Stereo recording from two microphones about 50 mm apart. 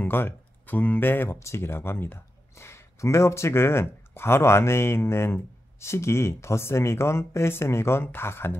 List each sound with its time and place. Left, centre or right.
0.0 s speech: left
1.3 s speech: left